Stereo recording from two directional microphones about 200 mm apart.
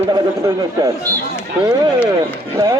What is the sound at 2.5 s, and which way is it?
Speech, 20° right (ahead or behind).